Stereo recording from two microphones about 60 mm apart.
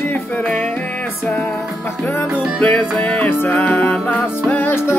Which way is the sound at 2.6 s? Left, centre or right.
Left.